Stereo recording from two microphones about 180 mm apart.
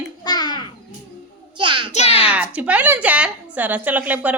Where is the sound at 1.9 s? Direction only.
35° left (ahead or behind).